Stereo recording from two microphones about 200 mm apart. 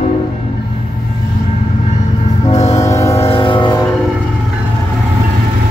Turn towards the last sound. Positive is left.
turn(degrees=20)  # may be behind; listen again after turning